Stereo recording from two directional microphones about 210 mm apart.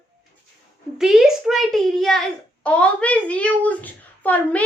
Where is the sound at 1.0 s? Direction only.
Centre (ahead or behind).